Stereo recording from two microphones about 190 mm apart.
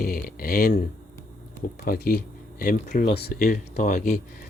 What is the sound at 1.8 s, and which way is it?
Speech, 50° left (ahead or behind).